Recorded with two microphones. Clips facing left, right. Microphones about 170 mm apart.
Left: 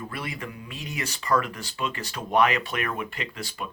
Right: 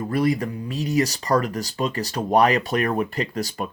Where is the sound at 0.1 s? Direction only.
40° right (ahead or behind).